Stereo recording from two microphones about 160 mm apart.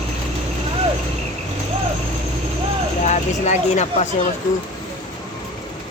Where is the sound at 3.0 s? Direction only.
45° left (ahead or behind).